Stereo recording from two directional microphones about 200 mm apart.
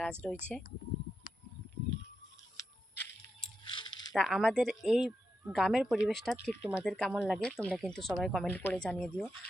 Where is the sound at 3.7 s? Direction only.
25° left (ahead or behind).